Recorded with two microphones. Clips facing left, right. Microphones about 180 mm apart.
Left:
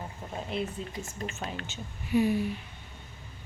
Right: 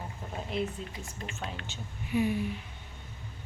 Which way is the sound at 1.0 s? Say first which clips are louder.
Left 3 dB; 40° left (ahead or behind).